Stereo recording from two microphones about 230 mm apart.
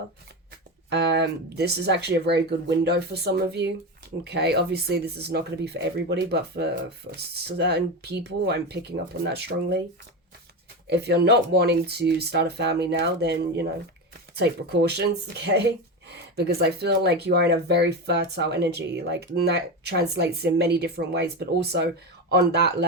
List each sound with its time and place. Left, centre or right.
0.9 s speech: right
10.8 s speech: right